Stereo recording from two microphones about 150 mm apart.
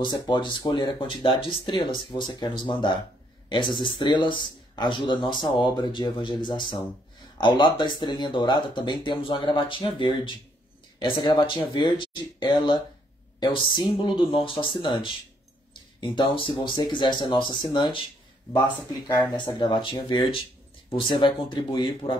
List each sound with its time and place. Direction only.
0.0 s speech: 30° left (ahead or behind)
19.3 s speech: 30° left (ahead or behind)